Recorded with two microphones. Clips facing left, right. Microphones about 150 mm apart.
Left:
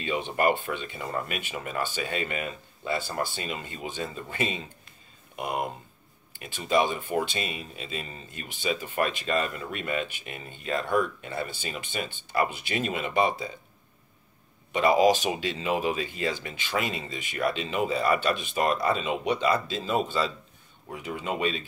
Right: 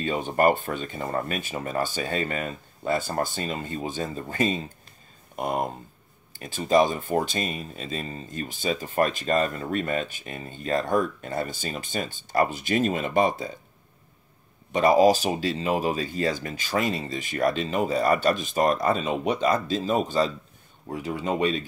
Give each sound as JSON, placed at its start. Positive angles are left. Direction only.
{"t": 0.0, "sound": "speech", "side_deg": -45}
{"t": 14.7, "sound": "speech", "side_deg": -40}